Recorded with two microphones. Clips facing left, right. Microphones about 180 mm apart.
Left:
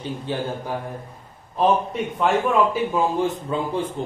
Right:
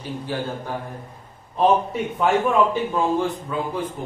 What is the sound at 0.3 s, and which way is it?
Speech, 20° left (ahead or behind).